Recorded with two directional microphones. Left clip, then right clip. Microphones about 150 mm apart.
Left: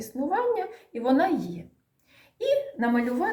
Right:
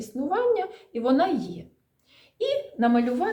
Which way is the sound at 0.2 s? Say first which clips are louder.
Right 2 dB; 15° right (ahead or behind).